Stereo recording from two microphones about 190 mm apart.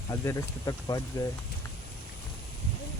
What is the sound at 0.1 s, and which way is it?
Speech, 15° left (ahead or behind).